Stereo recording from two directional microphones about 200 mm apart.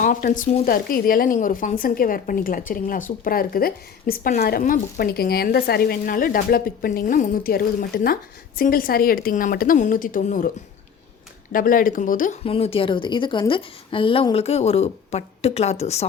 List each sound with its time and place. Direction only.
0.0 s a woman's voice: 40° left (ahead or behind)
11.5 s a woman's voice: 45° left (ahead or behind)